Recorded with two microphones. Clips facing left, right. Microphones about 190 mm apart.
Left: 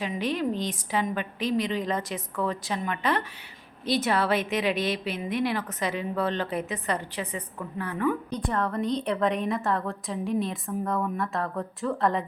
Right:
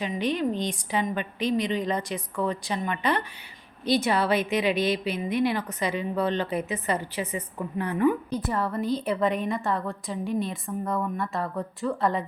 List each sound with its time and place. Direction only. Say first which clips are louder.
0.0 s a woman's voice: right 1 dB; centre (ahead or behind)
7.8 s a woman's voice: right 4 dB; 15° right (ahead or behind)